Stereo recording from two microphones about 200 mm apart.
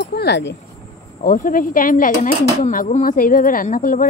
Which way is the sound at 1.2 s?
40° left (ahead or behind).